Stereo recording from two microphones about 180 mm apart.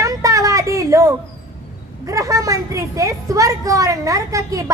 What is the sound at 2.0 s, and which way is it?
A woman's voice, 20° right (ahead or behind).